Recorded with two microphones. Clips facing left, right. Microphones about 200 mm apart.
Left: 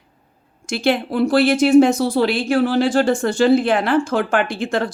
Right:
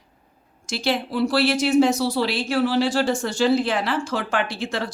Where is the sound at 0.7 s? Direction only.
55° left (ahead or behind).